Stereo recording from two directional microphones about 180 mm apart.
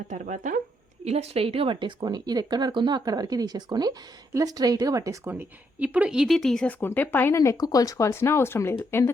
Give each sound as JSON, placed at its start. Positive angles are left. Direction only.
{"t": 0.1, "sound": "a woman's voice", "side_deg": -45}